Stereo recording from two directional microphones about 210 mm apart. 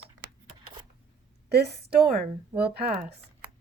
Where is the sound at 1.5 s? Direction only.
50° right (ahead or behind).